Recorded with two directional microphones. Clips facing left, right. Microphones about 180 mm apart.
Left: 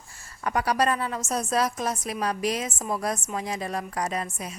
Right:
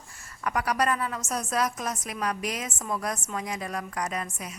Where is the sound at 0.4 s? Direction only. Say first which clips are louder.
Left 2 dB; 30° left (ahead or behind).